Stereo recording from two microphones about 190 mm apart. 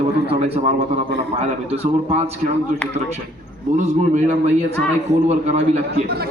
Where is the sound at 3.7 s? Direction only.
40° right (ahead or behind).